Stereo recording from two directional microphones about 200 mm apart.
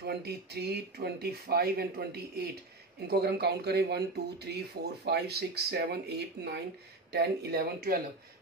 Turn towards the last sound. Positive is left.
turn(degrees=-50)  # may be behind; listen again after turning